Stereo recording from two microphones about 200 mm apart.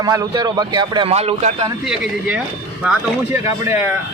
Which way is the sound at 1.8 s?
5° right (ahead or behind).